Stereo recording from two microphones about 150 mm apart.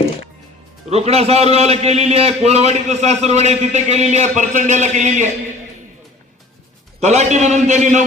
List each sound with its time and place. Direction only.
0.9 s a man's voice: 45° right (ahead or behind)
7.0 s a man's voice: 50° right (ahead or behind)